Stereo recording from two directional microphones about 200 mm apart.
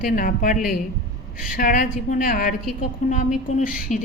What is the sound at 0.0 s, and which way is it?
A woman's voice, 45° left (ahead or behind).